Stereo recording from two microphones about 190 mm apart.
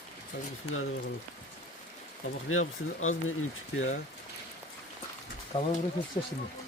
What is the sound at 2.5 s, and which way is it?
Speech, 90° left.